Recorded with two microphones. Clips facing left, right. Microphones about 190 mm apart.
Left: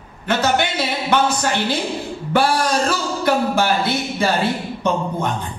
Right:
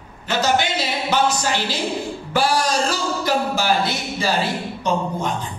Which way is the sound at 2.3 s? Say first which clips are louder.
Left 2 dB; 55° left (ahead or behind).